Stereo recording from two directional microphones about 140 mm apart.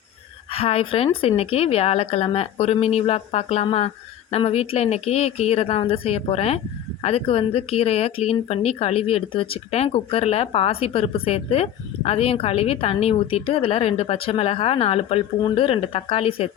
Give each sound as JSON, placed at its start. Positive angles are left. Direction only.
{"t": 0.5, "sound": "speech", "side_deg": 45}